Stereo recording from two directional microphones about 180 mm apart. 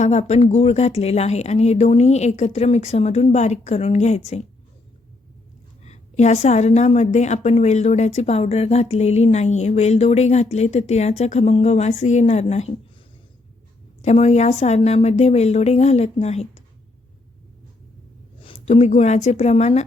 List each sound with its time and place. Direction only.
0.0 s a woman's voice: 40° left (ahead or behind)
5.8 s a woman's voice: 40° left (ahead or behind)
14.0 s a woman's voice: 40° left (ahead or behind)
18.3 s a woman's voice: 30° left (ahead or behind)